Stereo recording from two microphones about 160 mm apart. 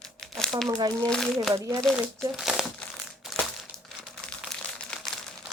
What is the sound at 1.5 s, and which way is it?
Speech, 20° right (ahead or behind).